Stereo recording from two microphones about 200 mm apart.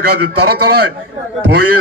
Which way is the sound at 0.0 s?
50° right (ahead or behind).